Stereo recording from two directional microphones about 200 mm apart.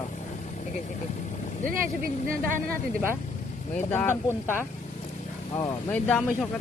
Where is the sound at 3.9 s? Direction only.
10° left (ahead or behind).